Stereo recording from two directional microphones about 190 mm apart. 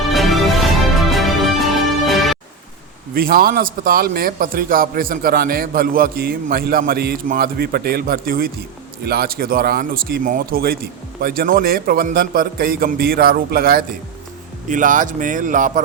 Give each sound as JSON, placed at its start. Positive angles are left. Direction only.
{"t": 0.1, "sound": "music", "side_deg": 0}
{"t": 3.2, "sound": "a man's voice", "side_deg": -50}